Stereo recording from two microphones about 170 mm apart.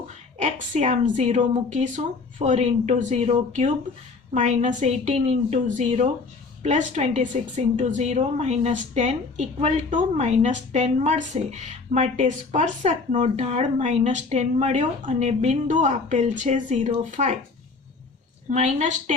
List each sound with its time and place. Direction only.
0.3 s a woman's voice: 40° right (ahead or behind)
18.5 s a woman's voice: 45° right (ahead or behind)